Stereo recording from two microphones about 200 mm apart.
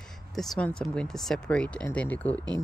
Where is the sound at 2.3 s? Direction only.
20° right (ahead or behind).